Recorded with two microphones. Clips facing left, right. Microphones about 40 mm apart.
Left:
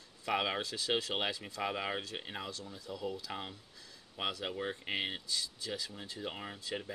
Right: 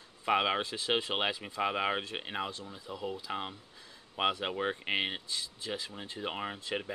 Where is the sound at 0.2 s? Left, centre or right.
Right.